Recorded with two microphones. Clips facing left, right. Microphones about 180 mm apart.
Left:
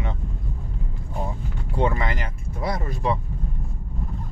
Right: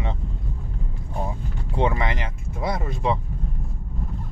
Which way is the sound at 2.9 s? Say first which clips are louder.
Right 1 dB; 20° right (ahead or behind).